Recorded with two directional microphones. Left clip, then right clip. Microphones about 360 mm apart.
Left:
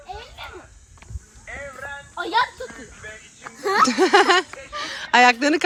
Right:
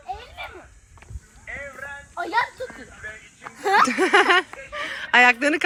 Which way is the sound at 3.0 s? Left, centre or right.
Left.